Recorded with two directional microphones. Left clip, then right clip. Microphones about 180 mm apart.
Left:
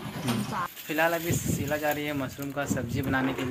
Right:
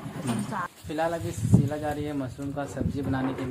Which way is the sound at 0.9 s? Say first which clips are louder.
Left 3 dB; 20° left (ahead or behind).